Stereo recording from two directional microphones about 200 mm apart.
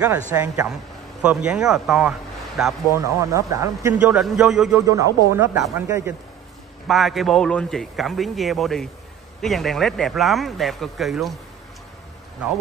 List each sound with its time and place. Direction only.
0.3 s speech: 10° right (ahead or behind)
3.0 s speech: 15° right (ahead or behind)
4.1 s a man's voice: centre (ahead or behind)
4.7 s speech: 15° right (ahead or behind)
6.9 s a man's voice: centre (ahead or behind)